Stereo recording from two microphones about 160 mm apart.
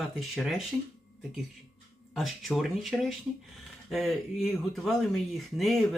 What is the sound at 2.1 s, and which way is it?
Speech, centre (ahead or behind).